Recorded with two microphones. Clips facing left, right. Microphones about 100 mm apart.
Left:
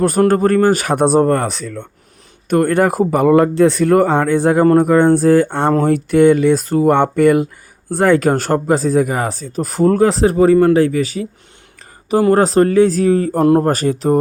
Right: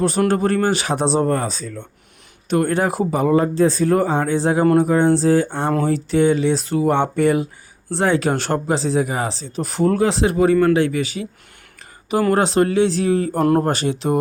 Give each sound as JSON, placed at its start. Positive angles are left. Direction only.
{"t": 0.0, "sound": "speech", "side_deg": 45}
{"t": 2.5, "sound": "speech", "side_deg": 55}
{"t": 12.3, "sound": "speech", "side_deg": 40}
{"t": 13.4, "sound": "speech", "side_deg": 25}
{"t": 13.7, "sound": "speech", "side_deg": 40}